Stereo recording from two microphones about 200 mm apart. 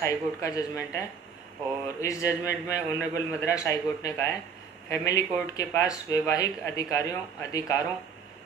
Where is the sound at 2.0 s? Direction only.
15° left (ahead or behind).